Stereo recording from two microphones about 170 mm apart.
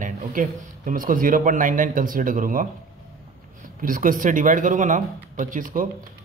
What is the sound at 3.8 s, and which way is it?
Speech, 55° right (ahead or behind).